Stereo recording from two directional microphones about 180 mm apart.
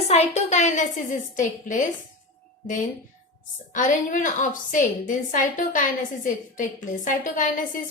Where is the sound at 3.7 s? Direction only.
45° left (ahead or behind).